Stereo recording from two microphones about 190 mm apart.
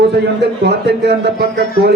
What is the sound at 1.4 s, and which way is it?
Speech, 50° left (ahead or behind).